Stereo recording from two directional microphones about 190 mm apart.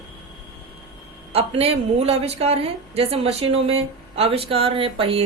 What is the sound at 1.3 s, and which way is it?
Speech, 30° right (ahead or behind).